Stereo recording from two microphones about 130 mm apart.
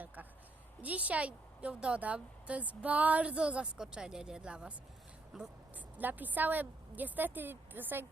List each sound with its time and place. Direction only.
0.8 s a woman's voice: 10° right (ahead or behind)
6.0 s a woman's voice: 15° right (ahead or behind)